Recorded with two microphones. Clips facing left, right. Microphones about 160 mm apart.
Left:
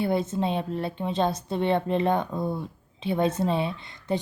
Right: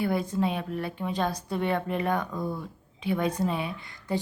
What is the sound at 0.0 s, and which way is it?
A woman's voice, 25° left (ahead or behind).